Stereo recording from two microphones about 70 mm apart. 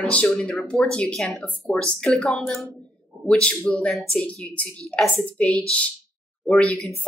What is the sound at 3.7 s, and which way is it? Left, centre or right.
Speech, centre.